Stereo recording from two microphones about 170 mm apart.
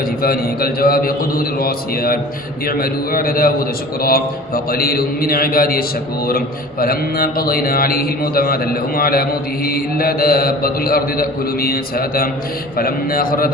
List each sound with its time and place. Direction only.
0.2 s mantra: 60° left (ahead or behind)